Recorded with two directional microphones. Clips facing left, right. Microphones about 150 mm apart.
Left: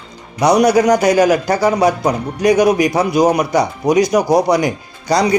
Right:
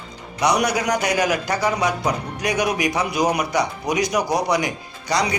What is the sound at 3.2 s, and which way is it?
Speech, 50° left (ahead or behind).